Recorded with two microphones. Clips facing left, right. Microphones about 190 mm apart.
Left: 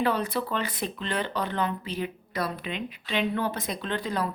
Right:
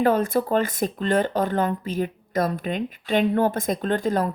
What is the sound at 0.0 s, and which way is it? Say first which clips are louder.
A woman's voice: right 6 dB; 45° right (ahead or behind).